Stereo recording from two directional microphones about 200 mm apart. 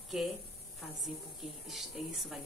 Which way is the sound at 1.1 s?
Centre (ahead or behind).